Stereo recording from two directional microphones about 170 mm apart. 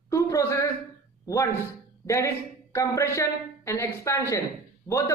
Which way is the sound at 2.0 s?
15° left (ahead or behind).